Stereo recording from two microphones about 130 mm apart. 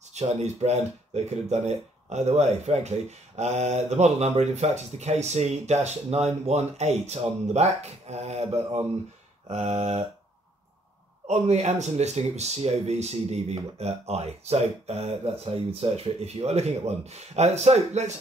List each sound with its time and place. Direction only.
0.1 s speech: 55° right (ahead or behind)
9.5 s speech: 55° right (ahead or behind)
11.2 s speech: 60° right (ahead or behind)